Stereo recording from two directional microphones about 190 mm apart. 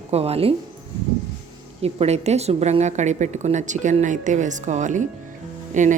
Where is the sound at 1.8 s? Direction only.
35° right (ahead or behind).